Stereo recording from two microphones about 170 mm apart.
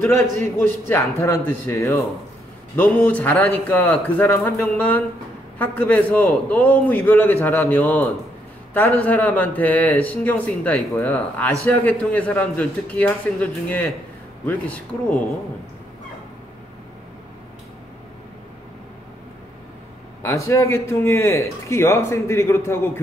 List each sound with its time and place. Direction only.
0.0 s speech: 15° left (ahead or behind)
20.2 s speech: 15° left (ahead or behind)